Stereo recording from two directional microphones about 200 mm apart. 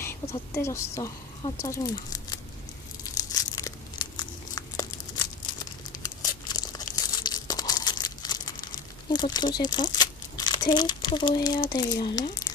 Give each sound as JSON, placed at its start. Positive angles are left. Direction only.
{"t": 0.0, "sound": "a sound", "side_deg": 10}
{"t": 0.5, "sound": "speech", "side_deg": 15}
{"t": 3.3, "sound": "crumpling", "side_deg": 20}
{"t": 6.5, "sound": "tearing", "side_deg": 20}
{"t": 10.0, "sound": "speech", "side_deg": 20}